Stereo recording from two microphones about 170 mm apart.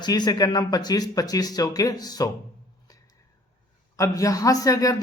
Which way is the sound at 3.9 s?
20° left (ahead or behind).